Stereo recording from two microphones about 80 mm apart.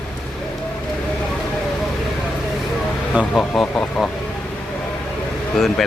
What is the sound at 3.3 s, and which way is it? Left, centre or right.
Speech, centre.